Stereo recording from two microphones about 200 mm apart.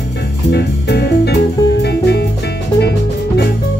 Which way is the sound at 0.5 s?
55° left (ahead or behind).